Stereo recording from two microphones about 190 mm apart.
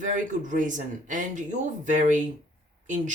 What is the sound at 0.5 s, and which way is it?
Speech, 40° right (ahead or behind).